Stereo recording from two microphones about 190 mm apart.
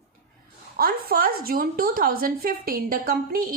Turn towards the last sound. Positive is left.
turn(degrees=-50)  # may be behind; listen again after turning